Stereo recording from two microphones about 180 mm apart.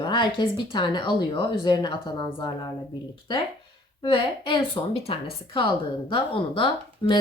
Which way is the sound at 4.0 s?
30° left (ahead or behind).